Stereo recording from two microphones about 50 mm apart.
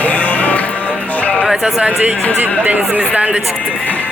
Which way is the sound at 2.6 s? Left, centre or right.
Right.